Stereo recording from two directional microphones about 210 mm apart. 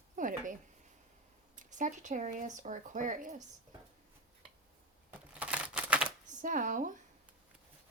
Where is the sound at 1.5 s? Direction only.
35° right (ahead or behind).